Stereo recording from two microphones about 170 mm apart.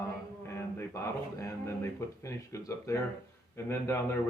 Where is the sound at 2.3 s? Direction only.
15° left (ahead or behind).